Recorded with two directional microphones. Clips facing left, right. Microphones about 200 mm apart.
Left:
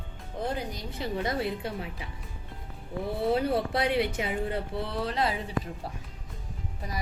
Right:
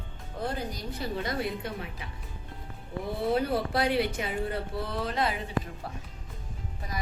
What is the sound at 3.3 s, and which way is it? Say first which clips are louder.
A woman's voice: even; 25° left (ahead or behind).